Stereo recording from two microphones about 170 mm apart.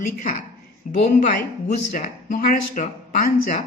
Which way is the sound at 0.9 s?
50° left (ahead or behind).